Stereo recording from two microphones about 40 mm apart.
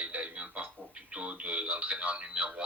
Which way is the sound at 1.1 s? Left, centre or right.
Right.